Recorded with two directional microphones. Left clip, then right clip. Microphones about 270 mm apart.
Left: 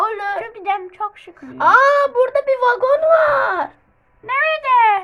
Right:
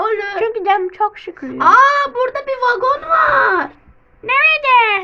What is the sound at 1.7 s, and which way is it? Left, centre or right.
A child's voice, centre.